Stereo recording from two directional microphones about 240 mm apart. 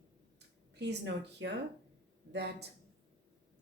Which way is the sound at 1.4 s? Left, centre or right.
Right.